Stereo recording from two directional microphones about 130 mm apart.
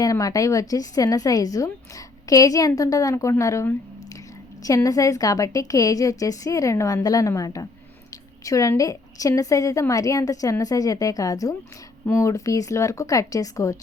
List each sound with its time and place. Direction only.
0.0 s a woman's voice: 25° left (ahead or behind)